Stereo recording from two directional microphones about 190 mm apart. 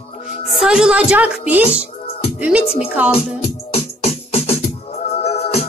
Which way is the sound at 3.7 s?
30° left (ahead or behind).